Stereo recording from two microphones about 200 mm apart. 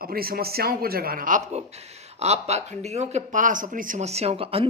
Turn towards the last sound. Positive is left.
turn(degrees=-30)  # may be behind; listen again after turning